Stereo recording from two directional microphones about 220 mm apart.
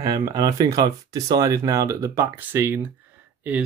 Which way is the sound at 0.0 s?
15° right (ahead or behind).